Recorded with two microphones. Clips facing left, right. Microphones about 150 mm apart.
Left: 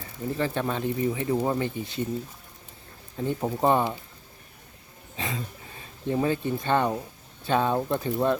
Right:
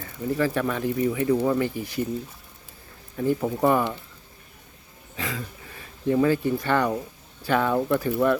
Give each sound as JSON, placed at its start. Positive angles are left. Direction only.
{"t": 0.3, "sound": "speech", "side_deg": 25}
{"t": 3.2, "sound": "speech", "side_deg": 25}
{"t": 5.1, "sound": "speech", "side_deg": 25}